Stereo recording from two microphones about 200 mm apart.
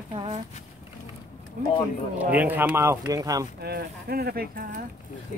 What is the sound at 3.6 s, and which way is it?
Speech, 50° right (ahead or behind).